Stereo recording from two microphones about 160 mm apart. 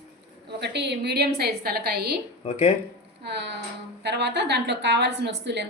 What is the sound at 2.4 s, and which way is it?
Speech, 40° left (ahead or behind).